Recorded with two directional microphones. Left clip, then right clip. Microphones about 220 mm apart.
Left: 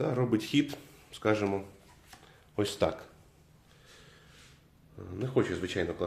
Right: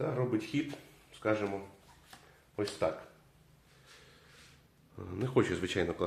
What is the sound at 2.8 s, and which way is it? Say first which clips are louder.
Speech: left 1 dB; 45° left (ahead or behind).